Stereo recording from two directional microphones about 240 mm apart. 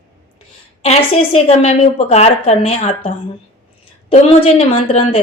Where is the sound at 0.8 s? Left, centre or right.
Left.